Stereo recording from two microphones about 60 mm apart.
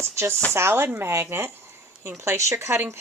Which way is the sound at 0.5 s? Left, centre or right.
Right.